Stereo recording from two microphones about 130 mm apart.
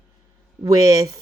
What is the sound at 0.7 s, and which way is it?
Speech, 25° right (ahead or behind).